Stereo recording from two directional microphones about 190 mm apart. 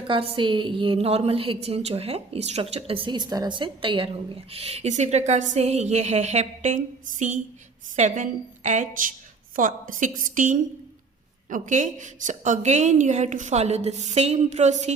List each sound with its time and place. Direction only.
0.1 s a woman's voice: 30° right (ahead or behind)